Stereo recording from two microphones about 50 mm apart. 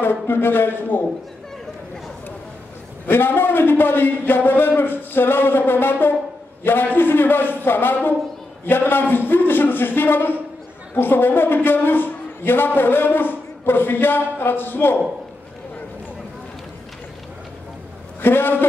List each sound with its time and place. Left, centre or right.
0.0 s a man's voice: left
3.1 s a man's voice: left
18.2 s a man's voice: left